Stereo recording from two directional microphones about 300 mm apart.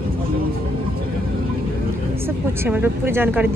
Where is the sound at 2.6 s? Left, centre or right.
Centre.